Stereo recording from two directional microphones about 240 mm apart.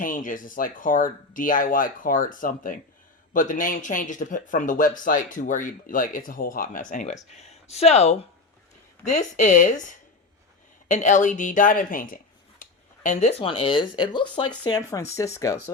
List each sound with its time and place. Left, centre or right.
0.0 s speech: left; by 15.7 s centre